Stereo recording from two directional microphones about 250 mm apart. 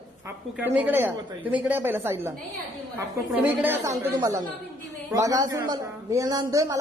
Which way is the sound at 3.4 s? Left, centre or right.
Centre.